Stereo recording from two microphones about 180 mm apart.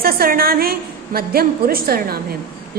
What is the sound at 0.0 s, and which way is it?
A woman's voice, 55° right (ahead or behind).